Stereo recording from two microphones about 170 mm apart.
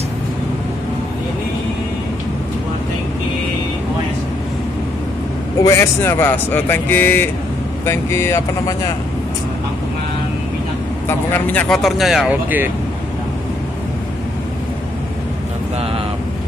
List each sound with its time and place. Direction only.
5.6 s speech: 15° left (ahead or behind)
11.1 s speech: 10° left (ahead or behind); by 12.7 s 10° right (ahead or behind)